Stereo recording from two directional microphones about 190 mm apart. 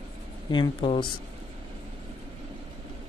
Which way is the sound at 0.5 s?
25° left (ahead or behind).